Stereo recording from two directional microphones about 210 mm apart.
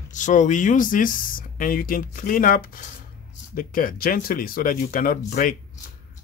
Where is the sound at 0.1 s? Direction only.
35° left (ahead or behind).